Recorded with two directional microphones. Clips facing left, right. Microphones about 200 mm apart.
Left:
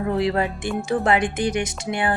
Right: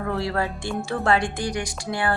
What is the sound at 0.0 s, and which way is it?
Speech, 20° left (ahead or behind).